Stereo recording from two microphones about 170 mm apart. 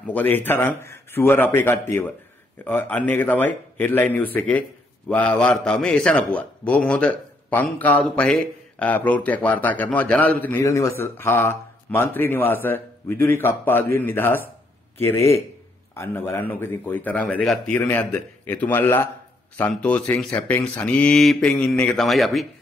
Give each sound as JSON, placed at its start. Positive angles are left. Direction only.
{"t": 0.0, "sound": "a man's voice", "side_deg": 10}